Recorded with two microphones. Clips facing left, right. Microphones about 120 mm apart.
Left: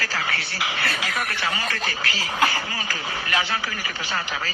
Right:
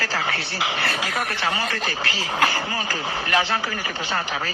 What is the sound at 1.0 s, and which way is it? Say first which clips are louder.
Speech: right 2 dB; 60° right (ahead or behind).